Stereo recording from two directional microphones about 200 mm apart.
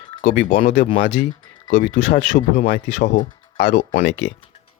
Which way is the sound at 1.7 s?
40° left (ahead or behind).